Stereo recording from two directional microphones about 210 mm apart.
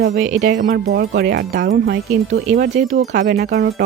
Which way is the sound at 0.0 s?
40° right (ahead or behind).